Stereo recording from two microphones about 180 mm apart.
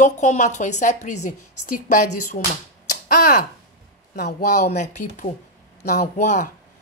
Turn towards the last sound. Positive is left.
turn(degrees=45)  # may be behind; listen again after turning